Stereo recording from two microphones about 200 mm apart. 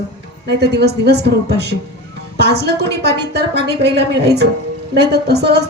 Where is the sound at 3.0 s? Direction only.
55° right (ahead or behind).